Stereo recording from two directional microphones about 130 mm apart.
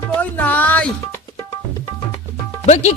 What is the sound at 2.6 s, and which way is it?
Speech, 60° left (ahead or behind).